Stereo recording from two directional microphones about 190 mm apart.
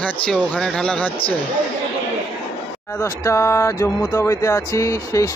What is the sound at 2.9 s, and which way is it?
Speech, 15° left (ahead or behind).